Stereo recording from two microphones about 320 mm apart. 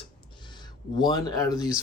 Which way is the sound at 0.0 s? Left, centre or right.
Centre.